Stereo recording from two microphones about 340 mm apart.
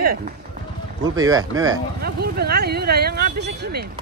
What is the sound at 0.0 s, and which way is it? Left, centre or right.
Speech, right.